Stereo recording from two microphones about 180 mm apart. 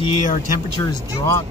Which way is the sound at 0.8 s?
15° left (ahead or behind).